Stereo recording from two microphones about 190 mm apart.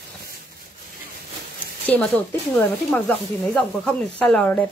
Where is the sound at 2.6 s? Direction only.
5° left (ahead or behind).